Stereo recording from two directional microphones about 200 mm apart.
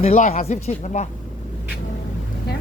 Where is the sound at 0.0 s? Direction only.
35° left (ahead or behind).